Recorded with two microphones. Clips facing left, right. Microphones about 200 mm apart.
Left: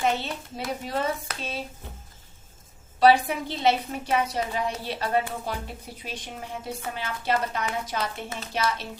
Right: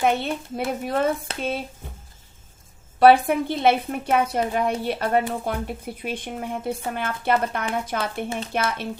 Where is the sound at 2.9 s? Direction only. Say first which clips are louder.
Right 4 dB; 55° right (ahead or behind).